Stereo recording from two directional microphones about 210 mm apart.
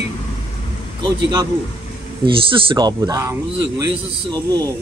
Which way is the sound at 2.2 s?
25° right (ahead or behind).